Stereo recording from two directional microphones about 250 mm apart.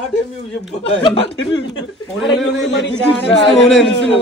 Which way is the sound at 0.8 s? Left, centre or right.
Left.